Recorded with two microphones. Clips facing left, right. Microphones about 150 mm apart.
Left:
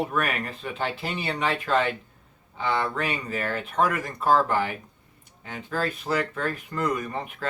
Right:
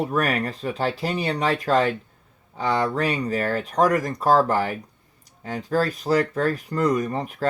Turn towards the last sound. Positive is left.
turn(degrees=-35)  # may be behind; listen again after turning